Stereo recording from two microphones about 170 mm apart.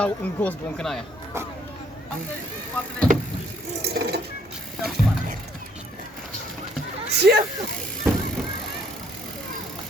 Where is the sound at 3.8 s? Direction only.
70° right (ahead or behind).